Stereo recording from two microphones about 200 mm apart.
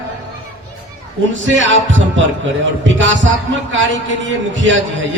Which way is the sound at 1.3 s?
70° right (ahead or behind).